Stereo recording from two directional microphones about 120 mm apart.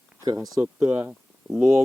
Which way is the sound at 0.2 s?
30° right (ahead or behind).